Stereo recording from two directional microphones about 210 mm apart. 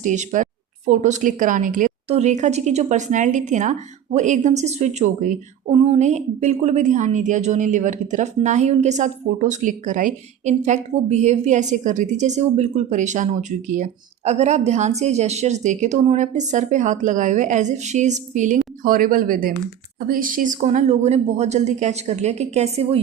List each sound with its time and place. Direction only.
0.0 s speech: 35° right (ahead or behind)